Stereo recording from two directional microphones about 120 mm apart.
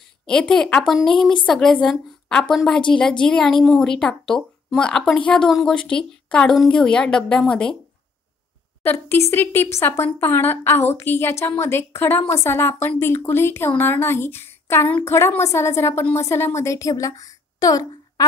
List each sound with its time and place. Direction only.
0.3 s a woman's voice: 5° left (ahead or behind)
8.8 s a woman's voice: 20° left (ahead or behind)